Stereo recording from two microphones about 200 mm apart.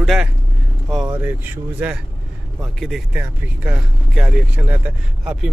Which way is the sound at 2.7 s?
Centre (ahead or behind).